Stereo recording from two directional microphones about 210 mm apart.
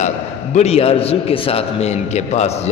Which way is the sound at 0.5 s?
30° left (ahead or behind).